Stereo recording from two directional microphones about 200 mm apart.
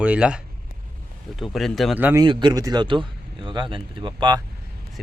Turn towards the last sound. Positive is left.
turn(degrees=-20)  # may be behind; listen again after turning